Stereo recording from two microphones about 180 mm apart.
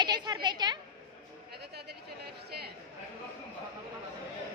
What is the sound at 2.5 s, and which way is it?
Chatter, 60° right (ahead or behind).